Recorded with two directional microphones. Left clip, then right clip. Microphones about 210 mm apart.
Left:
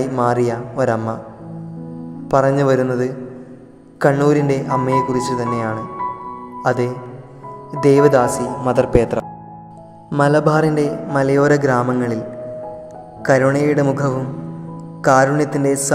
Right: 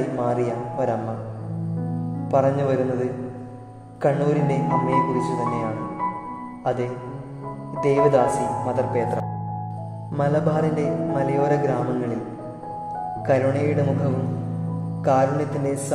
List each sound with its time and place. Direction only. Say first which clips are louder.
0.2 s a man's voice: left 8 dB; 25° left (ahead or behind)
2.3 s a man's voice: left 6 dB; 30° left (ahead or behind)
8.6 s a man's voice: left 8 dB; 40° left (ahead or behind)
13.2 s a man's voice: left 7 dB; 25° left (ahead or behind)